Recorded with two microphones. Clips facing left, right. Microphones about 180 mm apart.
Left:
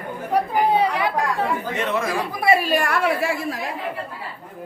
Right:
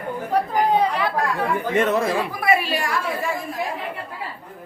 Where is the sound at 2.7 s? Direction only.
55° left (ahead or behind); by 3.3 s 70° left (ahead or behind).